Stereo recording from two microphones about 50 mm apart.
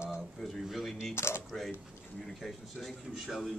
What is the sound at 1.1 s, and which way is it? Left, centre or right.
Speech, left.